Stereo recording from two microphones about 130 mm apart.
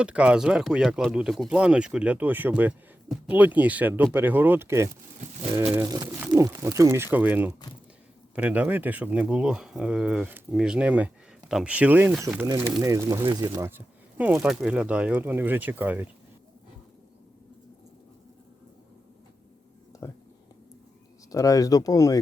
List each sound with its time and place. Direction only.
0.0 s speech: 10° right (ahead or behind)
12.8 s speech: 25° right (ahead or behind)
13.2 s speech: 30° right (ahead or behind)
13.5 s speech: 20° right (ahead or behind)
20.0 s whispering: 25° left (ahead or behind)
21.2 s speech: 25° left (ahead or behind)